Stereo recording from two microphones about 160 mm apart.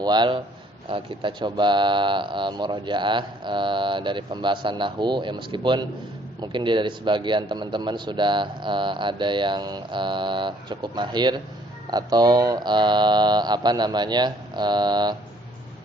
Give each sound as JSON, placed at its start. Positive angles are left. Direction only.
{"t": 0.0, "sound": "speech", "side_deg": -25}